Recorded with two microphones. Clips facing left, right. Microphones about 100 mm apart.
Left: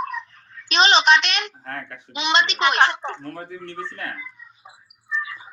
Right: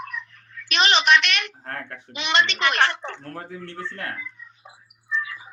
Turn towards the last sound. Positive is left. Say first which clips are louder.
# even
turn(degrees=0)  # may be behind; listen again after turning